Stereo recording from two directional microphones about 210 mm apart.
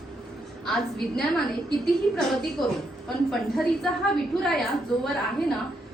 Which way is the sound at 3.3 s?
Centre (ahead or behind).